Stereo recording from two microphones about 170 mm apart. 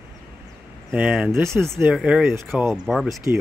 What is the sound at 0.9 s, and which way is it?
Speech, 10° right (ahead or behind).